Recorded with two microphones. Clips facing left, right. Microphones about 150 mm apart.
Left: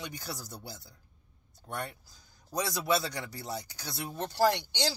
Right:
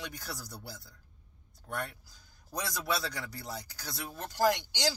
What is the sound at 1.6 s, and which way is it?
Speech, 25° left (ahead or behind).